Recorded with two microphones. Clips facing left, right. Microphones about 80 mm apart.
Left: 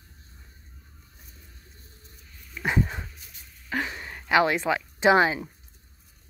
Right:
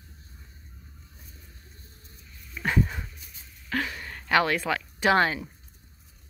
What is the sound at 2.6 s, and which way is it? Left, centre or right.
Speech, centre.